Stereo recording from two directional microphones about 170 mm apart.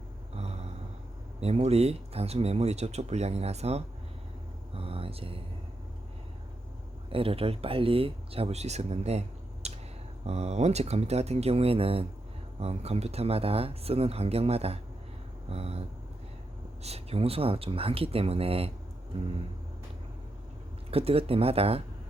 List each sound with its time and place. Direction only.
0.3 s a sound: 40° right (ahead or behind)
1.4 s speech: 40° right (ahead or behind)
4.7 s vehicle: 35° right (ahead or behind)
7.1 s speech: 35° right (ahead or behind)
9.6 s a sound: 40° right (ahead or behind)
10.2 s speech: 40° right (ahead or behind)
20.9 s speech: 35° right (ahead or behind)